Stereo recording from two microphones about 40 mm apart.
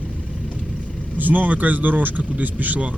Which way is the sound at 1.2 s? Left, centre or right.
Right.